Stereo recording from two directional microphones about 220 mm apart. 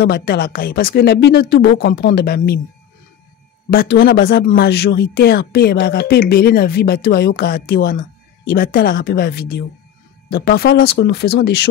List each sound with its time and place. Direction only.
0.0 s speech: 45° left (ahead or behind)
3.7 s speech: 50° left (ahead or behind)